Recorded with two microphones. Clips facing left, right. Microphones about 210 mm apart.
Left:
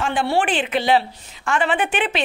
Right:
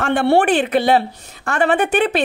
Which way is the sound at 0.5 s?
50° right (ahead or behind).